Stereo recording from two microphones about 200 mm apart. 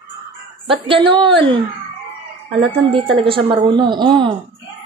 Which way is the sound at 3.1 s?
25° right (ahead or behind).